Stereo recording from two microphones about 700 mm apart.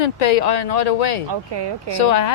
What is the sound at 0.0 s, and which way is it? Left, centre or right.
Speech, left.